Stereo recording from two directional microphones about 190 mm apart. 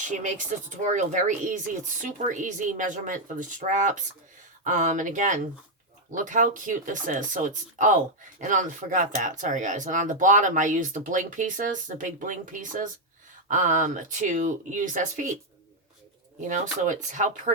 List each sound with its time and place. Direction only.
0.0 s speech: 40° right (ahead or behind)
16.4 s speech: 40° right (ahead or behind)